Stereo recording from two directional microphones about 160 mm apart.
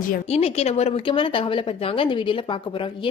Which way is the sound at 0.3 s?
40° left (ahead or behind).